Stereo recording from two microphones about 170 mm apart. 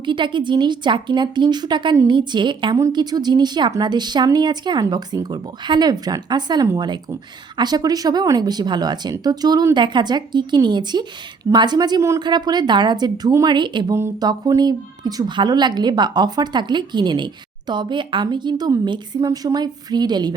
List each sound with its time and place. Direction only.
0.0 s speech: 30° right (ahead or behind)